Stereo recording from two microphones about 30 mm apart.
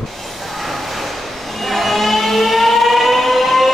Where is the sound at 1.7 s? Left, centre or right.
Centre.